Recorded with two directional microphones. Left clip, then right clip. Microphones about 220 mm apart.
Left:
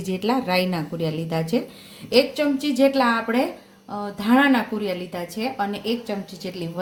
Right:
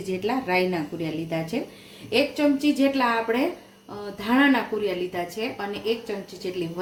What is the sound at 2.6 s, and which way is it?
A woman's voice, 35° left (ahead or behind).